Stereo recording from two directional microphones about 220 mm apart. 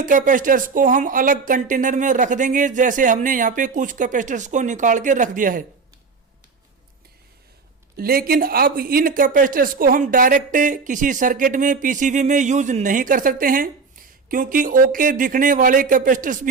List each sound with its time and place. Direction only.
0.0 s speech: 35° right (ahead or behind)
7.9 s speech: 40° right (ahead or behind)